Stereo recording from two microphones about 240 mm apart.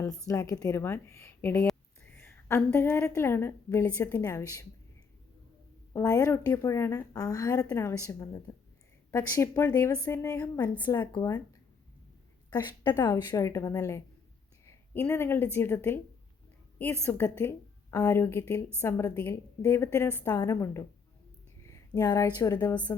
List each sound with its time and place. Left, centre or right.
0.3 s a woman's voice: centre
5.9 s a woman's voice: centre
12.5 s a woman's voice: centre
17.0 s a woman's voice: centre
21.7 s a sound: centre
22.4 s a woman's voice: centre